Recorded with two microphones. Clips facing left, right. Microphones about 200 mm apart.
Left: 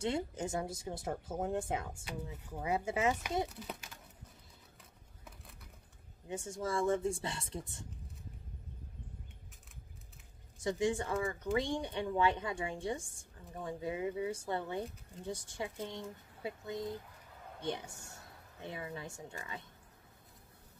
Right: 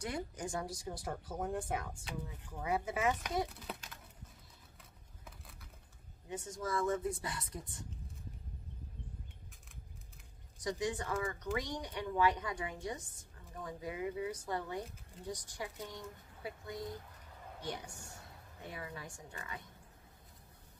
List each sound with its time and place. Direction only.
0.0 s speech: 25° left (ahead or behind)
6.2 s speech: 25° left (ahead or behind)
10.6 s speech: 25° left (ahead or behind)